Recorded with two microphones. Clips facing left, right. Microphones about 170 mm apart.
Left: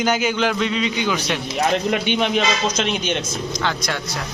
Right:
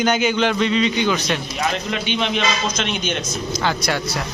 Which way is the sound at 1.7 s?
50° left (ahead or behind).